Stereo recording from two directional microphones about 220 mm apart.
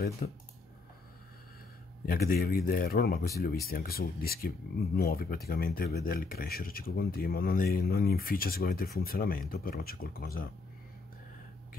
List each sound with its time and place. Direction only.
0.2 s speech: 40° left (ahead or behind)
2.0 s speech: 40° left (ahead or behind)